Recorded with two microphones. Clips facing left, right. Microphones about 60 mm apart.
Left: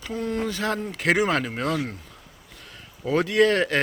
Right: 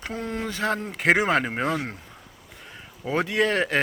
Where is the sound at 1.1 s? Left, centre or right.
Centre.